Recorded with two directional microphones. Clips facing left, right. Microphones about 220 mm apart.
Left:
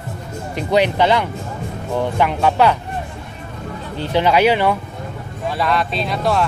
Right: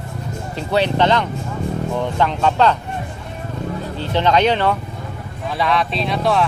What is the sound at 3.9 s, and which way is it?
Speech, 10° left (ahead or behind).